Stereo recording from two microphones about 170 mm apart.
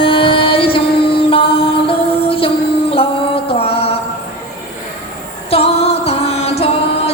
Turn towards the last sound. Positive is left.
turn(degrees=35)  # may be behind; listen again after turning